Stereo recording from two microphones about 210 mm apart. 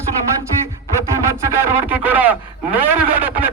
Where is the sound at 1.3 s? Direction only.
10° right (ahead or behind).